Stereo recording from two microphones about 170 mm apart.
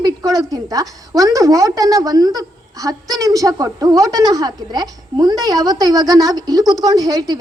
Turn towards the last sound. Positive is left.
turn(degrees=-20)  # may be behind; listen again after turning